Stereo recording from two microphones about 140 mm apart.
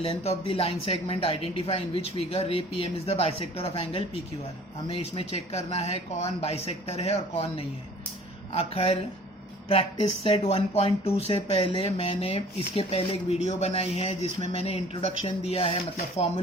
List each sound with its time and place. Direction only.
0.0 s speech: 45° left (ahead or behind)